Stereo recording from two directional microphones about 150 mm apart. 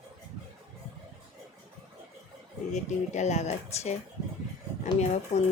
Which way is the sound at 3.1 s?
50° left (ahead or behind).